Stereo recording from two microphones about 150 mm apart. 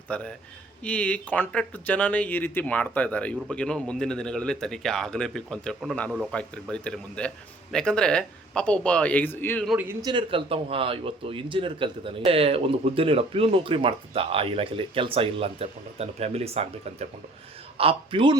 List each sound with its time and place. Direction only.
0.1 s speech: 10° left (ahead or behind)
10.0 s speech: 30° right (ahead or behind)